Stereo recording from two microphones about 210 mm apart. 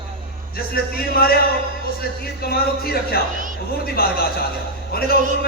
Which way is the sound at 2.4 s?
45° left (ahead or behind).